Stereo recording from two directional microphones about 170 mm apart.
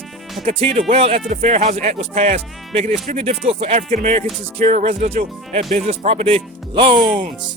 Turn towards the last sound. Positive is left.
turn(degrees=-30)  # may be behind; listen again after turning